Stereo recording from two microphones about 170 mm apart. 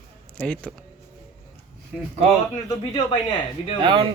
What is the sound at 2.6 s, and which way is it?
Speech, 25° left (ahead or behind).